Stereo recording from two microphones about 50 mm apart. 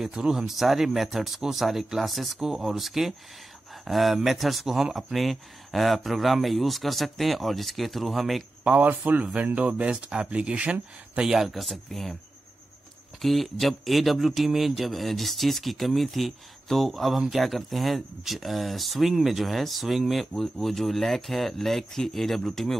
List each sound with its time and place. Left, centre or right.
0.1 s speech: centre
8.6 s speech: right; by 12.2 s centre
13.2 s speech: centre